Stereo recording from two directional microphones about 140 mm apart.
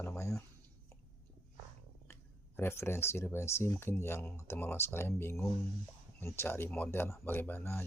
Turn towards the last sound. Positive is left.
turn(degrees=15)  # may be behind; listen again after turning